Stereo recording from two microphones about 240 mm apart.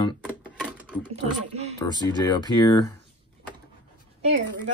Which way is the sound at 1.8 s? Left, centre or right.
Centre.